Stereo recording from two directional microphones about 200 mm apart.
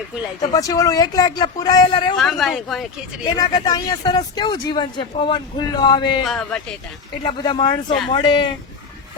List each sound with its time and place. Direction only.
0.4 s speech: 20° left (ahead or behind)
2.1 s speech: centre (ahead or behind)
3.2 s speech: 20° left (ahead or behind)
6.2 s speech: 5° left (ahead or behind)
7.4 s speech: 25° left (ahead or behind)